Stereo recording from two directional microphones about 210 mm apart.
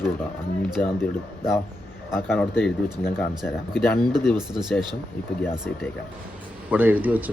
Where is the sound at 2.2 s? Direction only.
Centre (ahead or behind).